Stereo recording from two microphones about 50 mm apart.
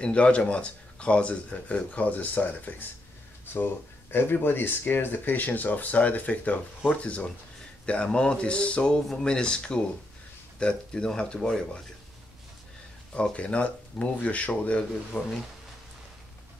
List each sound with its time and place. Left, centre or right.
0.0 s speech: left
3.5 s speech: left; by 11.8 s centre
13.1 s speech: left